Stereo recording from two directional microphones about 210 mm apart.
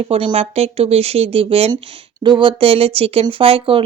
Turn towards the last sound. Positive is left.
turn(degrees=-25)  # may be behind; listen again after turning